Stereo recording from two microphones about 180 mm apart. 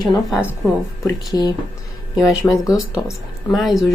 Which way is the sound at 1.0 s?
20° left (ahead or behind).